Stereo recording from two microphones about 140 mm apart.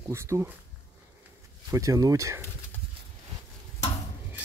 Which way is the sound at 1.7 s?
25° right (ahead or behind).